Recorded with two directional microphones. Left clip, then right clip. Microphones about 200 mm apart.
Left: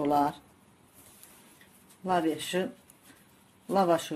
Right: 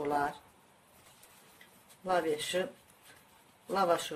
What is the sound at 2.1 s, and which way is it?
Speech, 25° left (ahead or behind).